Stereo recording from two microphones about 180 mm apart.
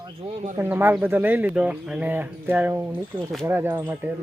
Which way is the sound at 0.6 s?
10° right (ahead or behind).